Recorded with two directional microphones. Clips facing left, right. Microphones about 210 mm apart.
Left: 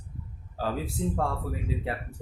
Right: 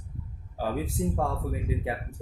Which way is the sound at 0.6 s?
15° right (ahead or behind).